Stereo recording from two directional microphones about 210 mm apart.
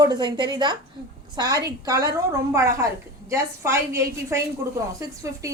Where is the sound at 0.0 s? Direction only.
20° right (ahead or behind).